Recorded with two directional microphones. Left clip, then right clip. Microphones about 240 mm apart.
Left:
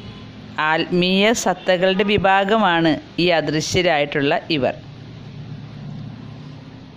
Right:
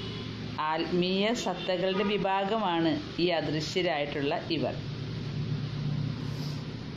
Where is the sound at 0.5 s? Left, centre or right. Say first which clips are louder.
Left 11 dB; left.